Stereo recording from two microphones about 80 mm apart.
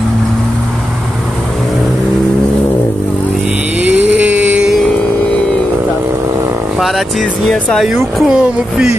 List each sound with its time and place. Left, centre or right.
3.8 s a sound: right
6.8 s speech: centre
8.3 s music: centre